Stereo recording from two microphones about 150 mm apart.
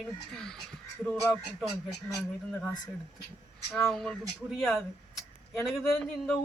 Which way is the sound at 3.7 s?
Centre (ahead or behind).